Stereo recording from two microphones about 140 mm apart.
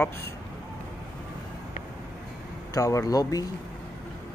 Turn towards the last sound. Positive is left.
turn(degrees=25)  # may be behind; listen again after turning